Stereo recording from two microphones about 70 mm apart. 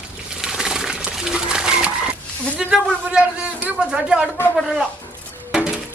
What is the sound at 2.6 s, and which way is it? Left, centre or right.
A man's voice, centre.